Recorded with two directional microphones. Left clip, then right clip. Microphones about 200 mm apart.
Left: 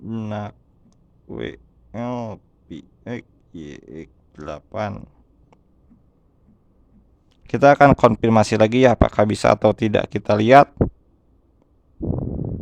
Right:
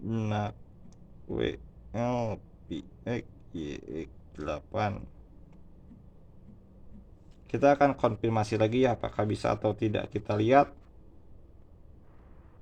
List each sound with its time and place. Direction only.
0.0 s speech: 20° left (ahead or behind)
7.4 s speech: 45° left (ahead or behind)